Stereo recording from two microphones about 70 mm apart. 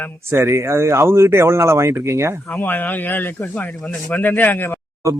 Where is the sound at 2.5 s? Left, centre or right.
Left.